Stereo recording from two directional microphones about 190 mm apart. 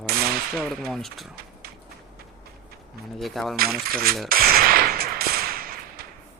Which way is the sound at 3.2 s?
Centre (ahead or behind).